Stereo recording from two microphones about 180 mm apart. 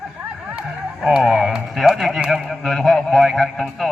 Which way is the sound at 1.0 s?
5° right (ahead or behind).